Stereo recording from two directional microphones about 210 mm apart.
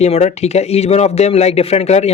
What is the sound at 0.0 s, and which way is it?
A man's voice, 30° left (ahead or behind).